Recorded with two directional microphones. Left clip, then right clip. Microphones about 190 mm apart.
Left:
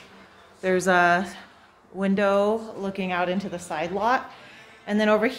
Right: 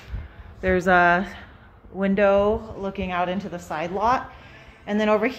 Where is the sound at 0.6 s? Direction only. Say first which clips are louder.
Right 2 dB; 5° right (ahead or behind).